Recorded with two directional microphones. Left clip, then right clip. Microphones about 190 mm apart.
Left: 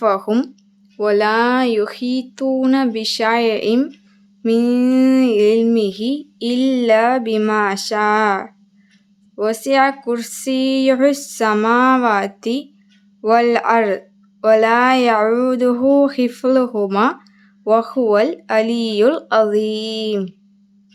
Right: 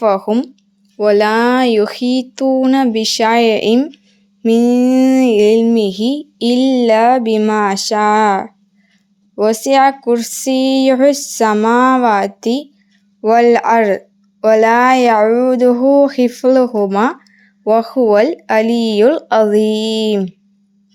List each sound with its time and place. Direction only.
0.0 s speech: 10° right (ahead or behind)
0.9 s speech: 15° right (ahead or behind)